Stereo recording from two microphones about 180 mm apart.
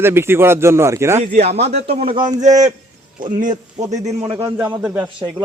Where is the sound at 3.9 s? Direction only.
30° right (ahead or behind).